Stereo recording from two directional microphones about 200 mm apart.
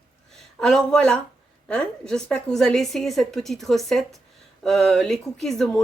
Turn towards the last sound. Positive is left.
turn(degrees=0)  # may be behind; listen again after turning